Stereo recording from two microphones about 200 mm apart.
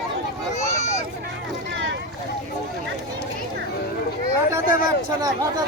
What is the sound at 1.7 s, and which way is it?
Boat, 60° right (ahead or behind).